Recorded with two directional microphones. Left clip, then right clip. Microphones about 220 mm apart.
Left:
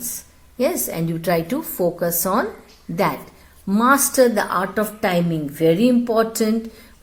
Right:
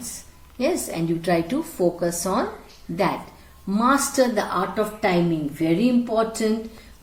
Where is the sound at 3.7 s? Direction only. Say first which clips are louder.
Left 4 dB; 45° left (ahead or behind).